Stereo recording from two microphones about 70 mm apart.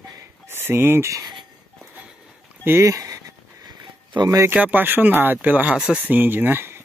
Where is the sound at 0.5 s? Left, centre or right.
Right.